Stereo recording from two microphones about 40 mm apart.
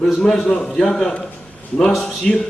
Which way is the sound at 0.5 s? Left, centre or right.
Left.